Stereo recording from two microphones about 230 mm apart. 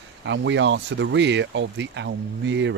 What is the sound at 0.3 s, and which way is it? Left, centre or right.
Speech, right.